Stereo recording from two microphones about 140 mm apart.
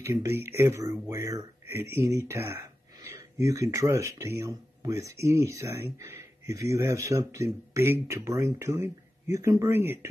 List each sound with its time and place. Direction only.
0.0 s speech: 20° right (ahead or behind)